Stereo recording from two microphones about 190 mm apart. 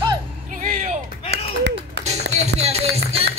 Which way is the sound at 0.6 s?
40° right (ahead or behind).